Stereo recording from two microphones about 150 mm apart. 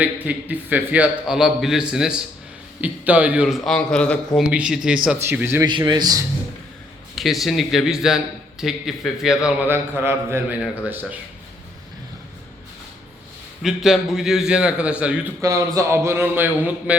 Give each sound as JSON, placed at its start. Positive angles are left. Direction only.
{"t": 0.0, "sound": "a man's voice", "side_deg": -10}
{"t": 4.4, "sound": "a man's voice", "side_deg": -5}
{"t": 5.6, "sound": "a man's voice", "side_deg": -30}
{"t": 7.2, "sound": "a man's voice", "side_deg": 0}
{"t": 13.6, "sound": "a man's voice", "side_deg": 0}
{"t": 15.4, "sound": "a man's voice", "side_deg": -20}